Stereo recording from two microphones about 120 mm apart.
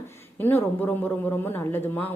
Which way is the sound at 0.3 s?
15° left (ahead or behind).